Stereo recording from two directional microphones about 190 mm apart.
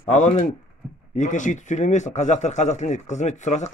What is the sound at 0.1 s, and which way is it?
A man's voice, 35° left (ahead or behind).